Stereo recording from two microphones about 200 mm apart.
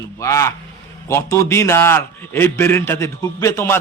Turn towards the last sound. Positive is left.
turn(degrees=10)  # may be behind; listen again after turning